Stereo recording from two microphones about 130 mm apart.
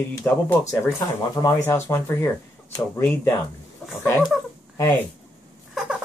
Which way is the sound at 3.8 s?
Centre (ahead or behind).